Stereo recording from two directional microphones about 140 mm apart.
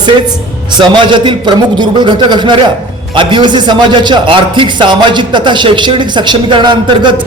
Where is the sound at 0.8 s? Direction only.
35° right (ahead or behind).